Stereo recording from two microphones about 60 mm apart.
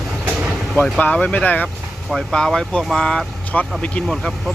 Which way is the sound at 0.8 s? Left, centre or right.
Left.